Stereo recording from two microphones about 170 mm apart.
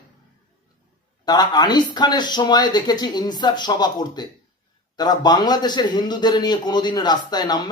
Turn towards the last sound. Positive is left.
turn(degrees=25)  # may be behind; listen again after turning